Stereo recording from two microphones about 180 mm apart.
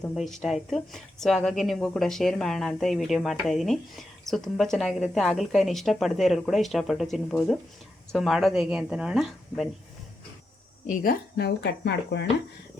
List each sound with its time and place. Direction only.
0.0 s a woman's voice: centre (ahead or behind)
10.8 s speech: 60° left (ahead or behind)